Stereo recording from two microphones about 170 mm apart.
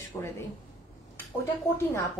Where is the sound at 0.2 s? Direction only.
10° left (ahead or behind).